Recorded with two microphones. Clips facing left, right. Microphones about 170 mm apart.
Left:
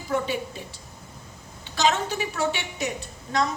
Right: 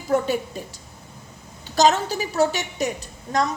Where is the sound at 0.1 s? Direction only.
40° right (ahead or behind).